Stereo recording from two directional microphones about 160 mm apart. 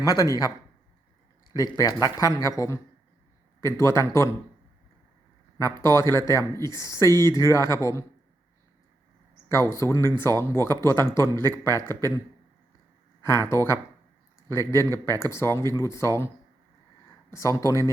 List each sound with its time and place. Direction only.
0.0 s speech: 20° left (ahead or behind)
1.5 s speech: 20° left (ahead or behind)
5.5 s speech: 15° left (ahead or behind)
9.5 s speech: 15° left (ahead or behind)
13.2 s speech: 15° left (ahead or behind)
17.3 s speech: 20° left (ahead or behind)